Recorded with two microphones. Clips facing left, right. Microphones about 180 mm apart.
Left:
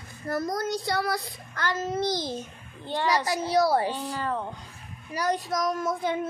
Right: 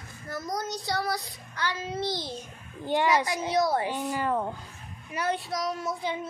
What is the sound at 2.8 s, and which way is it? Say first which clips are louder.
Speech: right 2 dB; 15° right (ahead or behind).